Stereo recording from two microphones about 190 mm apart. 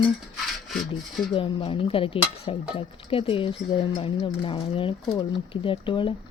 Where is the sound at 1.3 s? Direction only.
30° left (ahead or behind).